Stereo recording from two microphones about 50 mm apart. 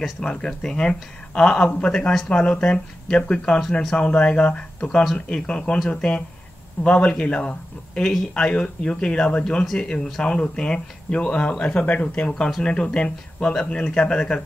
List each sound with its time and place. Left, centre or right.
0.2 s speech: centre